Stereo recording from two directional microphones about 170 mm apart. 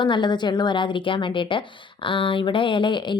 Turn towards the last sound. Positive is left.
turn(degrees=25)  # may be behind; listen again after turning